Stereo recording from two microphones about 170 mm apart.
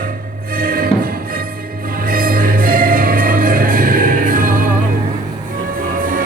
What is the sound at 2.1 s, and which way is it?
Music, 55° right (ahead or behind).